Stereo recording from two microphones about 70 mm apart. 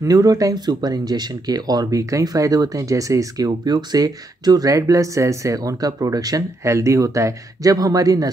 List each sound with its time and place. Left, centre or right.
0.0 s speech: right
6.6 s speech: right
7.7 s speech: right